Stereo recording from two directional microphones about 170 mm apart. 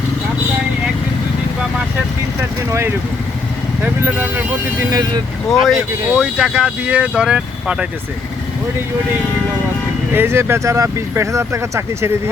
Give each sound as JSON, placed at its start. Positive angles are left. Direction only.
{"t": 4.0, "sound": "speech", "side_deg": -10}
{"t": 5.5, "sound": "speech", "side_deg": 0}
{"t": 10.1, "sound": "speech", "side_deg": -10}